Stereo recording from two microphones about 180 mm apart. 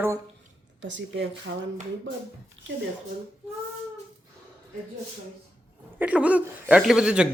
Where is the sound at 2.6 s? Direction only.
90° right.